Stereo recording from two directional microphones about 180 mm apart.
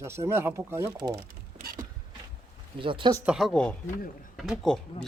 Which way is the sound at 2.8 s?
30° right (ahead or behind).